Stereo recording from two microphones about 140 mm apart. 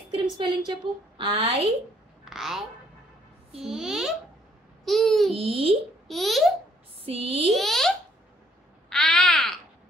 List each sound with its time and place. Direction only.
0.7 s a woman's voice: 40° right (ahead or behind)
2.2 s speech: centre (ahead or behind)
3.6 s a child's voice: 5° right (ahead or behind)
5.3 s a child's voice: 40° right (ahead or behind)
6.0 s a child's voice: centre (ahead or behind)
7.0 s speech: 40° right (ahead or behind)
7.5 s a child's voice: centre (ahead or behind)
8.8 s a sound: 5° left (ahead or behind)